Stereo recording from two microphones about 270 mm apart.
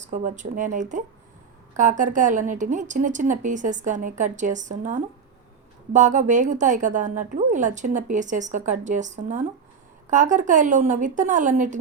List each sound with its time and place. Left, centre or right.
0.1 s a woman's voice: right